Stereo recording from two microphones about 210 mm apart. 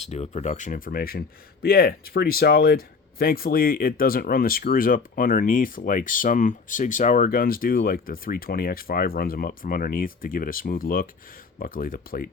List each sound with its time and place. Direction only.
0.0 s speech: 30° left (ahead or behind)